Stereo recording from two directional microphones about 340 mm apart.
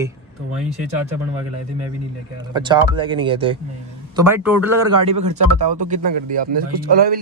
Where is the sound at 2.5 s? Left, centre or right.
Centre.